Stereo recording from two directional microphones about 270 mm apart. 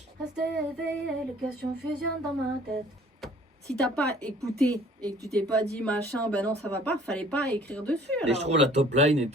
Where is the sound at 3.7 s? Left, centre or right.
Centre.